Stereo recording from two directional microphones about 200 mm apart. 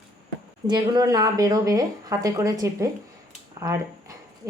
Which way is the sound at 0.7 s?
20° right (ahead or behind).